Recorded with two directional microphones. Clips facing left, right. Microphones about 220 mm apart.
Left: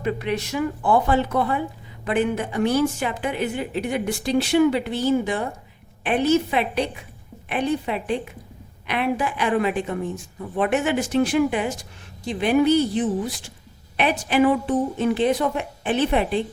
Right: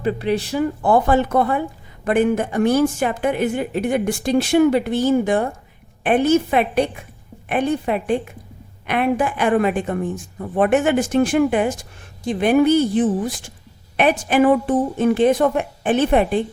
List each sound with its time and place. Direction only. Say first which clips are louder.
0.0 s a woman's voice: right 4 dB; 35° right (ahead or behind); by 16.4 s 50° right (ahead or behind)